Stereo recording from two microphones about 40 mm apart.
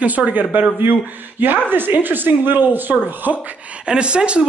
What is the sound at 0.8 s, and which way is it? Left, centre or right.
Speech, right.